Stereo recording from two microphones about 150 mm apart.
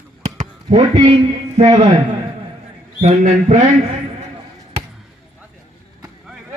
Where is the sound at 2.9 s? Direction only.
50° right (ahead or behind).